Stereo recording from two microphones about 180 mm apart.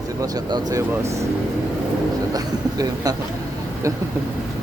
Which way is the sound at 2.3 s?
20° right (ahead or behind).